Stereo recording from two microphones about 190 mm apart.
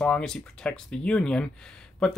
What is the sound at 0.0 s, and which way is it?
Speech, 5° left (ahead or behind).